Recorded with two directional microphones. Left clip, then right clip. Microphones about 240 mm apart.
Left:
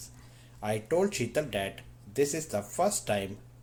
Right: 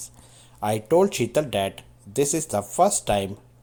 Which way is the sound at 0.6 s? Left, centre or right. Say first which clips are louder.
Right 9 dB; right.